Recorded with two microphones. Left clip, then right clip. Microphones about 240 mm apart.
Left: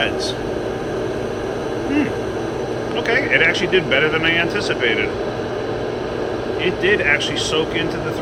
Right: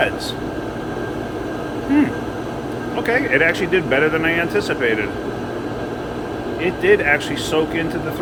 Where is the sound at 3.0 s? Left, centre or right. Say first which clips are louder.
Even; centre.